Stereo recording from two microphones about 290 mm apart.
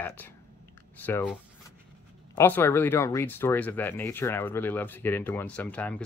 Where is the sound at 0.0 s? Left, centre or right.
Centre.